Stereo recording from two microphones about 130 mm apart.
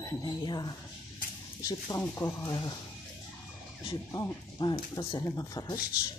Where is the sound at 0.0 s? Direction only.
30° left (ahead or behind).